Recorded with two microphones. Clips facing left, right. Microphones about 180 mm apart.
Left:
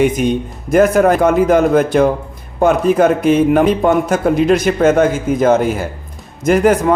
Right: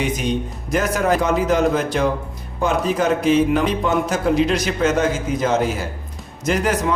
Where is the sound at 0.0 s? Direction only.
50° left (ahead or behind).